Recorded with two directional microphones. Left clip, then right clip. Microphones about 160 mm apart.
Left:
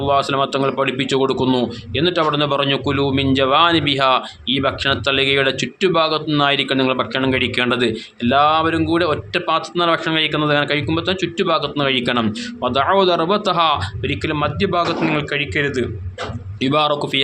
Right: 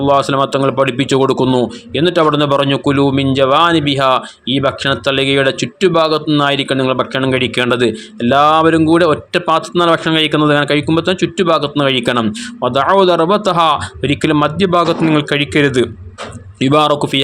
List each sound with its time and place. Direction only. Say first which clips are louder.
0.0 s speech: right 5 dB; 40° right (ahead or behind); by 15.9 s 60° right (ahead or behind)
16.6 s speech: right 6 dB; 45° right (ahead or behind)